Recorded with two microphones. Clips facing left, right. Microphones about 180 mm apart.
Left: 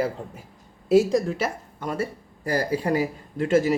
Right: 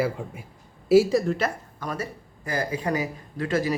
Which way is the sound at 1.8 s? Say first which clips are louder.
Left 4 dB; 25° left (ahead or behind).